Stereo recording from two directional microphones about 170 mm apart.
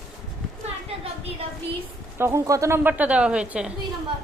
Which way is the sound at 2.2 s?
15° right (ahead or behind).